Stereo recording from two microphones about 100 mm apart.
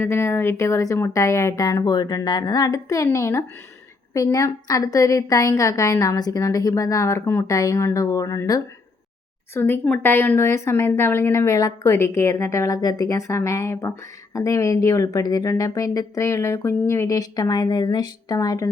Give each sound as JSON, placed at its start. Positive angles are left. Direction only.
{"t": 0.0, "sound": "speech", "side_deg": 25}
{"t": 9.6, "sound": "a woman's voice", "side_deg": 20}